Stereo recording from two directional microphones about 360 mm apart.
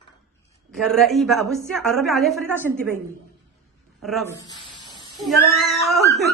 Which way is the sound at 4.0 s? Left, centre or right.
Centre.